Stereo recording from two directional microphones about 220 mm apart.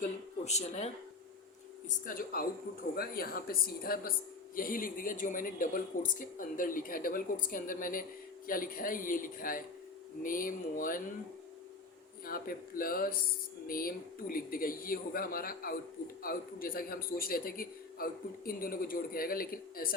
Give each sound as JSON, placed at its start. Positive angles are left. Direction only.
{"t": 0.0, "sound": "speech", "side_deg": 30}
{"t": 2.0, "sound": "a man's voice", "side_deg": 40}
{"t": 12.2, "sound": "a man's voice", "side_deg": 40}